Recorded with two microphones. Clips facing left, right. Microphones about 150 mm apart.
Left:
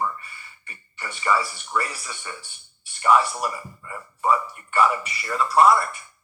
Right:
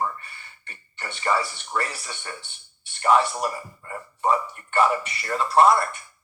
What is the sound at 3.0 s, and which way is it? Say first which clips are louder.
A man's voice: even; 30° right (ahead or behind).